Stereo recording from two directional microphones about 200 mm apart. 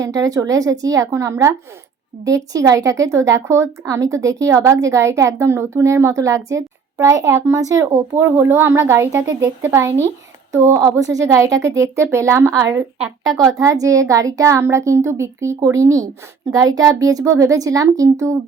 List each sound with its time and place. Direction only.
0.0 s speech: 15° right (ahead or behind)